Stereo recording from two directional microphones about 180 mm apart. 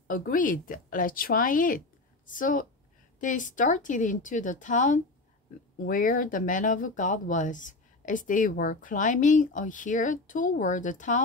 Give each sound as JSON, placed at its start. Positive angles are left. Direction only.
{"t": 0.1, "sound": "speech", "side_deg": 50}